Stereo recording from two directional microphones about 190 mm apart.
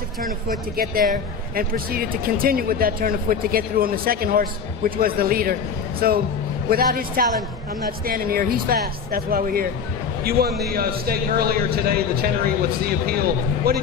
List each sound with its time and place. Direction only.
1.1 s speech: 50° right (ahead or behind)